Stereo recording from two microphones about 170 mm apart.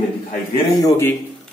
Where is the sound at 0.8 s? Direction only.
15° left (ahead or behind).